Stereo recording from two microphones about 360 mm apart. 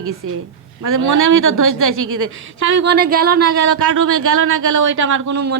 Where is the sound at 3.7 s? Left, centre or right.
Right.